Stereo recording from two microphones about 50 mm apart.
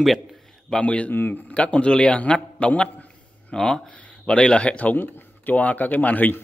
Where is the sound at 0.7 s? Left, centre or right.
Left.